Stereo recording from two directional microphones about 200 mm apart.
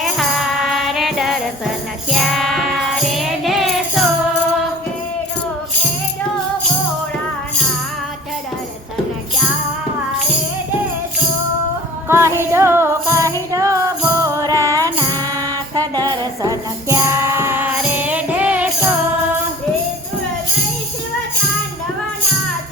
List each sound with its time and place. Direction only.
0.0 s music: centre (ahead or behind)
12.0 s music: 10° right (ahead or behind)